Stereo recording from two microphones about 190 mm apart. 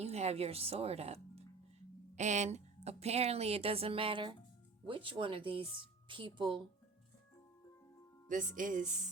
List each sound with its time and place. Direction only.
0.0 s speech: 35° right (ahead or behind)
8.3 s music: 45° right (ahead or behind)